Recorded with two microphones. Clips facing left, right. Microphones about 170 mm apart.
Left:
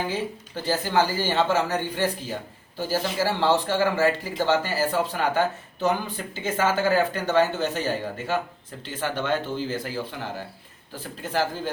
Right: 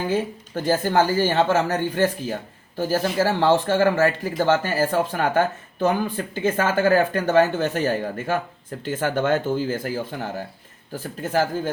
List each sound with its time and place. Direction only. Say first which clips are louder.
0.1 s speech: right 5 dB; 50° right (ahead or behind)